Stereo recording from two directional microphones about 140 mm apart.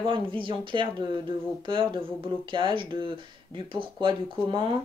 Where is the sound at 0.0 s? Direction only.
35° right (ahead or behind).